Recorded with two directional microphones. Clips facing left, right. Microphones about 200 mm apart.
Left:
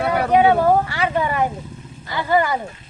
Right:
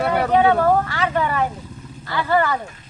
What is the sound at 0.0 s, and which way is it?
Vehicle, 10° left (ahead or behind).